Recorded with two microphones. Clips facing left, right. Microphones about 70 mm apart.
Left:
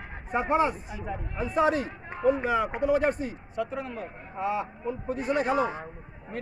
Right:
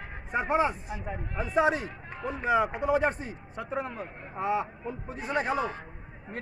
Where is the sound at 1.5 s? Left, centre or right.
Centre.